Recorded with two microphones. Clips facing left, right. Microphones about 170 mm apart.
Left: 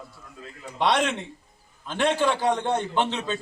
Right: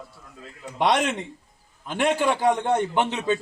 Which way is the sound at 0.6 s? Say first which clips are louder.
Right 1 dB; 15° right (ahead or behind).